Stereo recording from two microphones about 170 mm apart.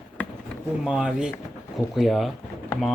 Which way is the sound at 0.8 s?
5° right (ahead or behind).